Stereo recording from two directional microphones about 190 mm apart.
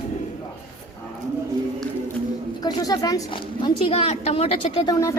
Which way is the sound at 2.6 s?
20° left (ahead or behind).